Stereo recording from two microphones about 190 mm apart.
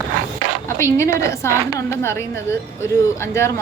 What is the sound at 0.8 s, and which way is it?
A woman's voice, 15° left (ahead or behind).